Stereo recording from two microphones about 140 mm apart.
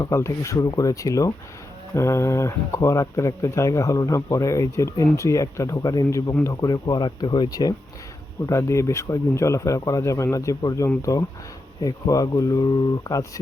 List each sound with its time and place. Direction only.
0.0 s speech: 20° left (ahead or behind)